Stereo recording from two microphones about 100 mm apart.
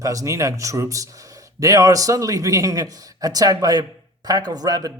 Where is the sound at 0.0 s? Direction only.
35° right (ahead or behind).